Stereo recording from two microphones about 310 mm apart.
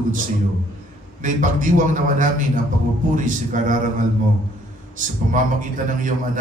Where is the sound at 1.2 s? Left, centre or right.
Right.